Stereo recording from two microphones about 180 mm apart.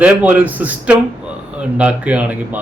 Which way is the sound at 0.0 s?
10° right (ahead or behind).